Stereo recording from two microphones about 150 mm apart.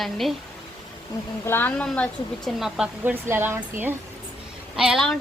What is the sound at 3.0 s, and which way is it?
Speech, 15° right (ahead or behind).